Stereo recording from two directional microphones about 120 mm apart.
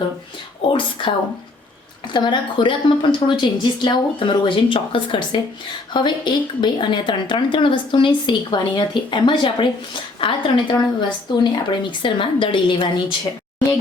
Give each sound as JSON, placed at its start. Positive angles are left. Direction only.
{"t": 0.7, "sound": "a woman's voice", "side_deg": 45}
{"t": 2.1, "sound": "a woman's voice", "side_deg": 40}